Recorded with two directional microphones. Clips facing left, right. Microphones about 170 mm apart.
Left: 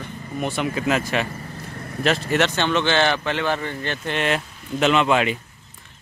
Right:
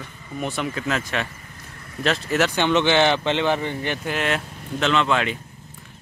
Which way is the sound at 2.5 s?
15° right (ahead or behind).